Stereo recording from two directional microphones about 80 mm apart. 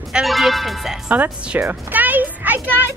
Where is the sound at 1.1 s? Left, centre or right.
Centre.